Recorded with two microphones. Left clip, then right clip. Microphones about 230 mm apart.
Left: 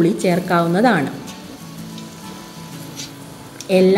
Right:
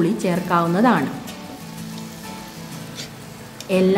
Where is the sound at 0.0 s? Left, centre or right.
Centre.